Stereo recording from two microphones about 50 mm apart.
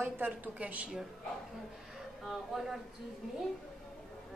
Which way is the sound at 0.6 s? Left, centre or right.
Right.